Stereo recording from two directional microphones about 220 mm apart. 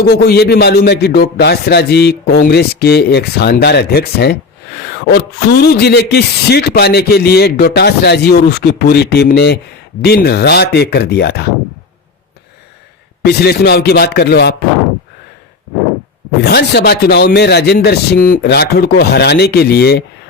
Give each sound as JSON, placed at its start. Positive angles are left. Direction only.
{"t": 0.0, "sound": "speech", "side_deg": 45}
{"t": 13.2, "sound": "speech", "side_deg": 45}
{"t": 16.4, "sound": "speech", "side_deg": 50}